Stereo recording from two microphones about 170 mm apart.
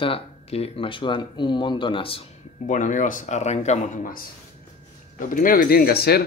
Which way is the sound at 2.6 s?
50° left (ahead or behind).